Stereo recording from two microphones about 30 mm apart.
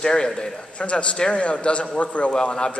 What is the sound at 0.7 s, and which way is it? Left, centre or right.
A man's voice, left.